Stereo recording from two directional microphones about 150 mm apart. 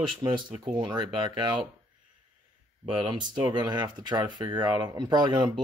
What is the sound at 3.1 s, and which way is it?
Speech, 30° right (ahead or behind).